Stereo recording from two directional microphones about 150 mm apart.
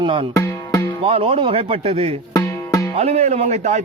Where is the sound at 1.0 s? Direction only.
40° right (ahead or behind).